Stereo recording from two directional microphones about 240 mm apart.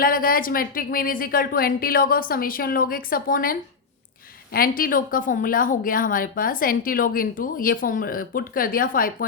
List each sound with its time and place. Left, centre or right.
0.0 s a woman's voice: left
4.8 s a woman's voice: left